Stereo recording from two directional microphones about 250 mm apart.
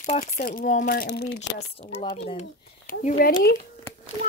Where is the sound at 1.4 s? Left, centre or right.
Left.